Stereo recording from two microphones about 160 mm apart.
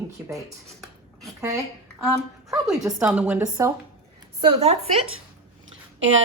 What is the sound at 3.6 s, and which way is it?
Speech, 20° right (ahead or behind).